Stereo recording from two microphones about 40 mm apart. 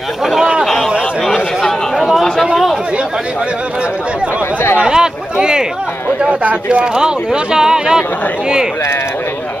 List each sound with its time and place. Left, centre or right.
0.7 s a sound: centre
2.0 s chatter: centre
4.8 s speech: centre
7.5 s speech: centre